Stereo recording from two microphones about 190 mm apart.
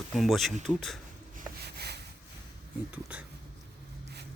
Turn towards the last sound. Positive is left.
turn(degrees=-10)  # may be behind; listen again after turning